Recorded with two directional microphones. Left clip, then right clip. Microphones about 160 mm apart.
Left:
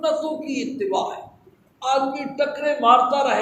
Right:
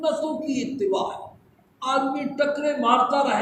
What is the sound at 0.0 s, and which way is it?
A man's voice, 20° left (ahead or behind).